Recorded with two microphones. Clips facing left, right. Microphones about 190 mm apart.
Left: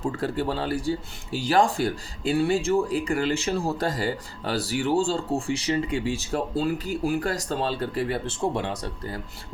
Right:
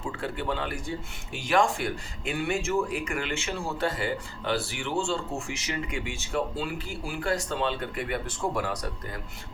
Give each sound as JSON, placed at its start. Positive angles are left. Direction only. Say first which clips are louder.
{"t": 0.0, "sound": "speech", "louder": "left 6 dB", "side_deg": 40}